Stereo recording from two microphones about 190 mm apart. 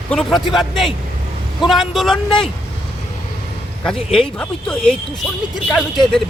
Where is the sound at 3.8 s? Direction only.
Centre (ahead or behind).